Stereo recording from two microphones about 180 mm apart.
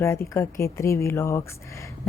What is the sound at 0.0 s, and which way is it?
A woman's voice, 15° left (ahead or behind).